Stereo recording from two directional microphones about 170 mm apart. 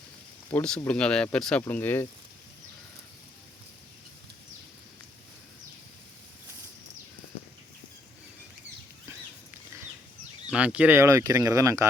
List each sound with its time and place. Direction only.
0.5 s speech: 5° left (ahead or behind)
10.5 s speech: 10° right (ahead or behind)